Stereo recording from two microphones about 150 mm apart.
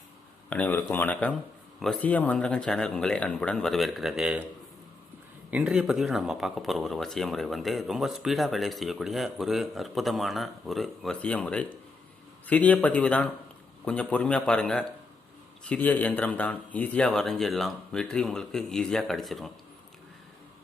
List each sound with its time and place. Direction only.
0.5 s a man's voice: 10° left (ahead or behind); by 4.4 s 5° right (ahead or behind)
5.5 s a man's voice: 5° right (ahead or behind)